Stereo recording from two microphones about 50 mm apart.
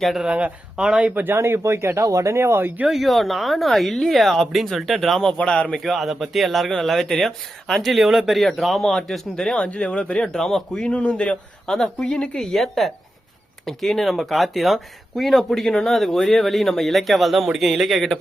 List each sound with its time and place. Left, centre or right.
0.2 s speech: right
1.1 s speech: right
1.4 s speech: right
2.9 s speech: centre
5.5 s speech: left
5.7 s a woman's voice: centre
9.6 s speech: left
10.2 s a woman's voice: centre
10.8 s speech: left
11.6 s a woman's voice: centre
12.4 s speech: centre